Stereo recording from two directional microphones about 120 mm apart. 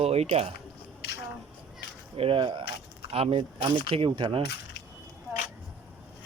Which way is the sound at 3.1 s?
55° right (ahead or behind).